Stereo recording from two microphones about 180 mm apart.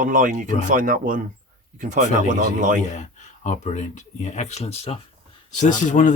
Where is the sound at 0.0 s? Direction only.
45° right (ahead or behind).